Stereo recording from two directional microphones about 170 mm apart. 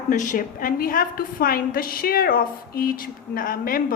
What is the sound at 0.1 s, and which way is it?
A woman's voice, 50° left (ahead or behind).